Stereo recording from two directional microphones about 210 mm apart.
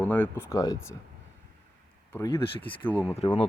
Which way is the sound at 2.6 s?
25° left (ahead or behind).